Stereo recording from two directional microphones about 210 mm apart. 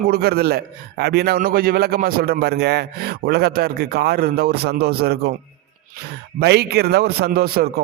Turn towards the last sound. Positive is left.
turn(degrees=-45)  # may be behind; listen again after turning